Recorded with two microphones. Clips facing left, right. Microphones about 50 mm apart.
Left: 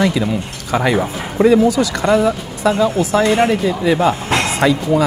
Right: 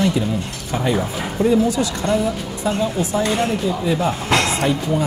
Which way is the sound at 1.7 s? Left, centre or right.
Left.